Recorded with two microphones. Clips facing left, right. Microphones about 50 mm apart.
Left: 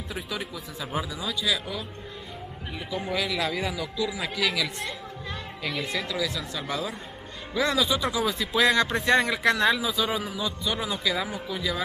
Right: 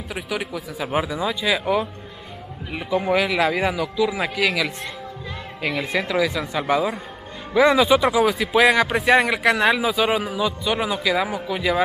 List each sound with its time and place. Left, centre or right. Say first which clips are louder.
0.8 s speech: right 8 dB; right
3.2 s speech: right 8 dB; centre
4.1 s speech: right 6 dB; right
8.3 s speech: right 6 dB; centre
10.0 s speech: right 7 dB; right